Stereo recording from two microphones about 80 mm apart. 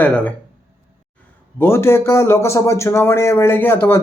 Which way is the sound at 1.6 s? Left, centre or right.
Left.